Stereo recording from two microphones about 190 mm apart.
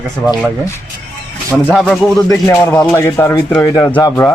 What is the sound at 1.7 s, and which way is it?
Speech, centre (ahead or behind).